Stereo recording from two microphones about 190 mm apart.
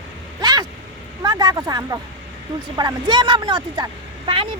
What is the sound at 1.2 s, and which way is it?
Speech, 20° right (ahead or behind).